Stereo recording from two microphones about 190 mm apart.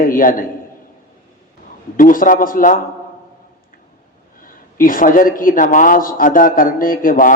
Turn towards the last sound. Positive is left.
turn(degrees=45)  # may be behind; listen again after turning